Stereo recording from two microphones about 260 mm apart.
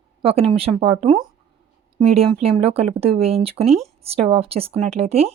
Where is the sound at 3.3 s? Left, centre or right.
Right.